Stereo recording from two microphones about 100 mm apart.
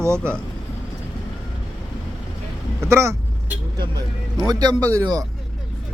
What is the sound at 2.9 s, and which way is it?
Speech, 25° right (ahead or behind).